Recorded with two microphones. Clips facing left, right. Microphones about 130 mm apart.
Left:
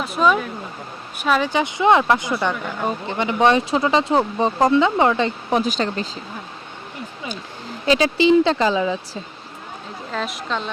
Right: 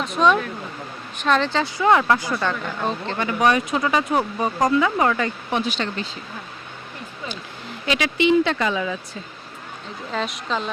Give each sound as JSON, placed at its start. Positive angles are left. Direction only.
{"t": 0.0, "sound": "a woman's voice", "side_deg": 5}
{"t": 5.5, "sound": "speech", "side_deg": 40}
{"t": 7.9, "sound": "speech", "side_deg": 30}
{"t": 10.1, "sound": "a woman's voice", "side_deg": 0}